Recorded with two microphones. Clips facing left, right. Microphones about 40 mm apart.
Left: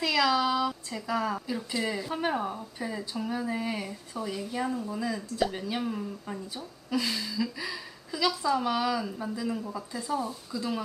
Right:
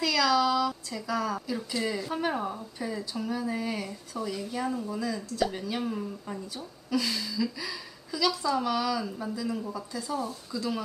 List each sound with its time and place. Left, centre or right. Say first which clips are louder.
0.0 s speech: right 1 dB; centre
4.9 s speech: left 1 dB; centre
6.9 s a woman's voice: right 1 dB; left
9.0 s speech: even; centre
9.3 s a woman's voice: even; centre
10.2 s speech: even; centre